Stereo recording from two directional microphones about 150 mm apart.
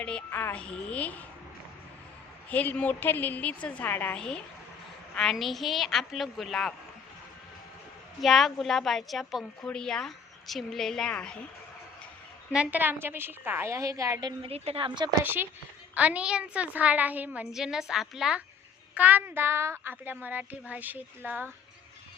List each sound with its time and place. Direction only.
0.0 s a woman's voice: 10° left (ahead or behind)
2.5 s a woman's voice: 10° left (ahead or behind)
8.2 s a woman's voice: centre (ahead or behind)
12.5 s a woman's voice: 10° right (ahead or behind)
14.5 s speech: 45° right (ahead or behind)
15.2 s a woman's voice: 15° right (ahead or behind)